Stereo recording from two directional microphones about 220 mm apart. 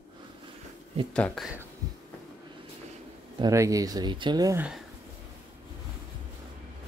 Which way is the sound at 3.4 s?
15° right (ahead or behind).